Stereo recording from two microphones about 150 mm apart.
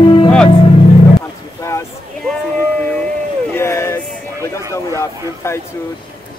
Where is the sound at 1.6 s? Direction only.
20° left (ahead or behind).